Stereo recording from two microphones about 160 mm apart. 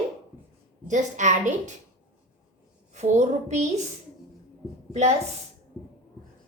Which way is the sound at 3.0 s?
45° right (ahead or behind).